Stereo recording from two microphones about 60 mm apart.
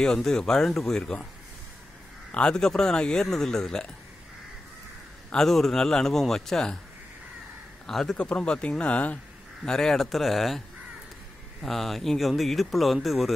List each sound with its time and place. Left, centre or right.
0.0 s speech: centre
2.3 s speech: centre
5.3 s speech: centre
7.8 s a man's voice: centre
8.2 s speech: centre
9.7 s speech: centre
11.6 s speech: centre